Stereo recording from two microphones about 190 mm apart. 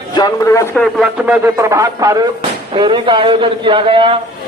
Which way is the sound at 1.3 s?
15° right (ahead or behind).